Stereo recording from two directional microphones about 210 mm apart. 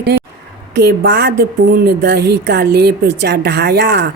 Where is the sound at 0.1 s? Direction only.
55° right (ahead or behind).